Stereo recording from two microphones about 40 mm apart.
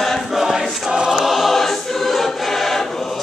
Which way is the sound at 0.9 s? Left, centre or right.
Centre.